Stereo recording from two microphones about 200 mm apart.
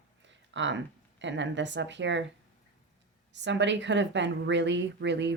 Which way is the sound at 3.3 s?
60° right (ahead or behind).